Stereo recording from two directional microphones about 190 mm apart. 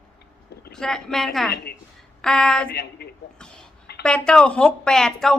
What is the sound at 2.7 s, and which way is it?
Speech, 55° left (ahead or behind).